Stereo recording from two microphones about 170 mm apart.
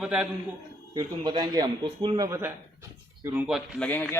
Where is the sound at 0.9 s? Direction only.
25° right (ahead or behind).